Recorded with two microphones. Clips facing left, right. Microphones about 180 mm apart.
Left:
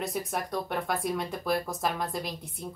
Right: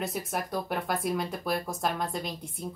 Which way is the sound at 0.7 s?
Centre (ahead or behind).